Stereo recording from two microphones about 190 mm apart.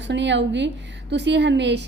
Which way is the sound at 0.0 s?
70° right (ahead or behind).